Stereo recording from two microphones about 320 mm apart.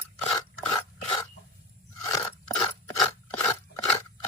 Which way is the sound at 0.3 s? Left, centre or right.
Centre.